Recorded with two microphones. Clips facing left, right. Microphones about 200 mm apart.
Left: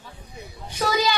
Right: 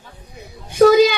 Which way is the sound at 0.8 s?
55° right (ahead or behind).